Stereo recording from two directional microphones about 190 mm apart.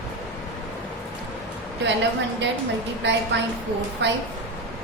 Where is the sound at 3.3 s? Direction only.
65° right (ahead or behind).